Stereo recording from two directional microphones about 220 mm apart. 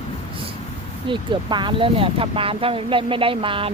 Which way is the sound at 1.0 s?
20° right (ahead or behind).